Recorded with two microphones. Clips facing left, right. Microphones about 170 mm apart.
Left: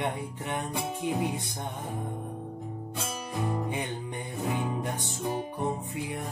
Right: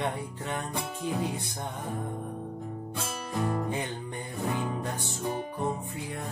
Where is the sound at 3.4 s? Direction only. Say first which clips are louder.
Right 1 dB; 20° left (ahead or behind).